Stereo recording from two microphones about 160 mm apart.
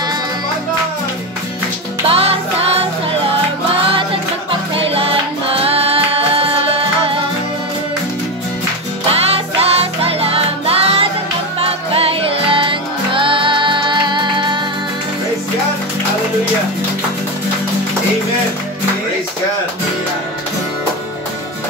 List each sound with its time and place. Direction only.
2.0 s music: 35° right (ahead or behind)
3.9 s music: 35° right (ahead or behind)
9.1 s music: 40° right (ahead or behind)